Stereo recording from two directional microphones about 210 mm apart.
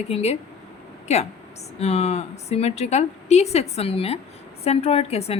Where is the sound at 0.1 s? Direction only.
30° left (ahead or behind).